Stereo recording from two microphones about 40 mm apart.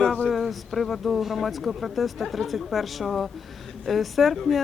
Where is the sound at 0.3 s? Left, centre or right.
Centre.